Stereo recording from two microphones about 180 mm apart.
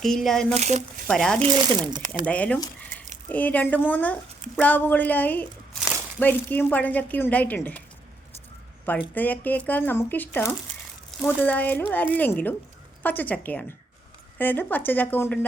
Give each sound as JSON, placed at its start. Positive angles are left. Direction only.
{"t": 0.0, "sound": "speech", "side_deg": 0}
{"t": 0.5, "sound": "speech", "side_deg": -40}
{"t": 1.0, "sound": "speech", "side_deg": 5}
{"t": 1.4, "sound": "speech", "side_deg": -25}
{"t": 2.2, "sound": "speech", "side_deg": 5}
{"t": 9.1, "sound": "speech", "side_deg": 10}